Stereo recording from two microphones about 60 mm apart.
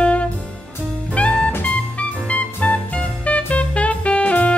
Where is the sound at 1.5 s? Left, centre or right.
Left.